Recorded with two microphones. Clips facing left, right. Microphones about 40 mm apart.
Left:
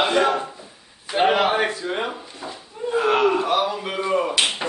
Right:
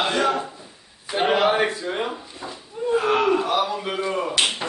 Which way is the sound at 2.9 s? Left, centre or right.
Centre.